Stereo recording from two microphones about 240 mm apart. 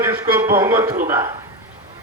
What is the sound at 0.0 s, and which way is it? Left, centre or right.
A man's voice, centre.